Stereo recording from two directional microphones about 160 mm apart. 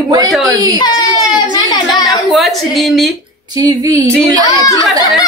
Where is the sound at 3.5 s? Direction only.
25° right (ahead or behind).